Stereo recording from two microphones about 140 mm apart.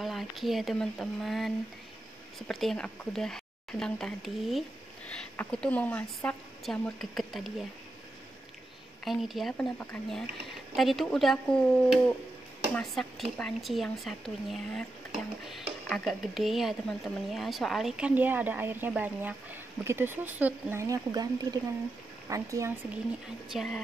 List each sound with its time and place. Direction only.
0.0 s speech: centre (ahead or behind)
9.0 s speech: centre (ahead or behind)
20.8 s speech: 25° right (ahead or behind)
23.5 s speech: centre (ahead or behind)